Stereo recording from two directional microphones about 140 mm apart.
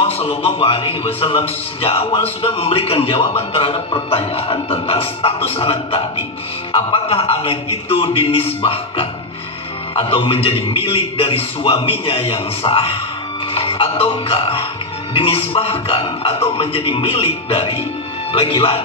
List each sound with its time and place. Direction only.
0.0 s a man's voice: 45° left (ahead or behind)